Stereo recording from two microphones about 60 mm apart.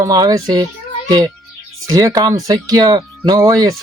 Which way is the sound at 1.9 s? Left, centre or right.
Right.